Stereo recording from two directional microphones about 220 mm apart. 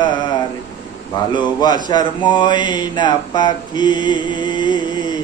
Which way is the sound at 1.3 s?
20° left (ahead or behind).